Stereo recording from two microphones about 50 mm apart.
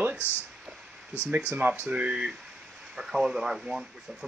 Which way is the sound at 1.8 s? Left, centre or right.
Right.